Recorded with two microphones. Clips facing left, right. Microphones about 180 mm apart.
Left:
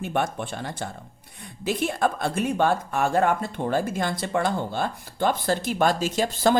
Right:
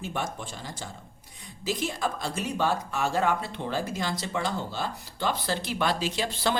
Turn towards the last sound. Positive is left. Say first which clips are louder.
# left 6 dB
turn(degrees=45)  # may be behind; listen again after turning